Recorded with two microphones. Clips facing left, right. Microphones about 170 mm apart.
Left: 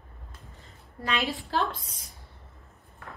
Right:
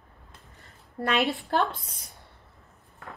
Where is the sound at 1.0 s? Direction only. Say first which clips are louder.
Right 4 dB; 60° right (ahead or behind).